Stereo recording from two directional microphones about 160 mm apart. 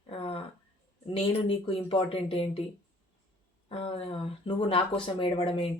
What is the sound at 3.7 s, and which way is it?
Speech, 35° left (ahead or behind).